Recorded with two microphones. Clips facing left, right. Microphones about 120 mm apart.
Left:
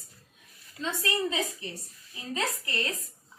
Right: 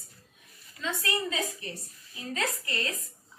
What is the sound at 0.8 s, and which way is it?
A woman's voice, 25° left (ahead or behind).